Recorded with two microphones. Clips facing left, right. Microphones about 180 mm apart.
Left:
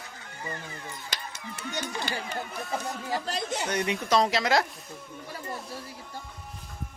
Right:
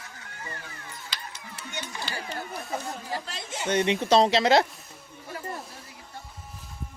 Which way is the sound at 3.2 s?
40° left (ahead or behind).